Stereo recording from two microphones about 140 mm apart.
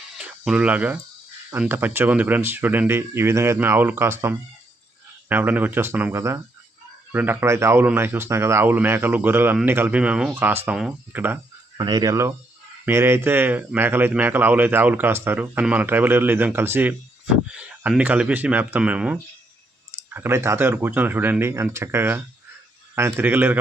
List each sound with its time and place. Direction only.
0.2 s speech: 5° right (ahead or behind)
11.8 s speech: 30° right (ahead or behind)
12.8 s speech: 20° right (ahead or behind)